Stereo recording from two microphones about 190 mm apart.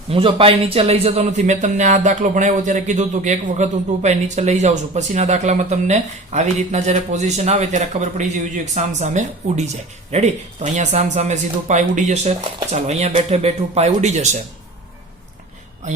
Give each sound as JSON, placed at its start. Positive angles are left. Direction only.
{"t": 0.1, "sound": "a man's voice", "side_deg": -30}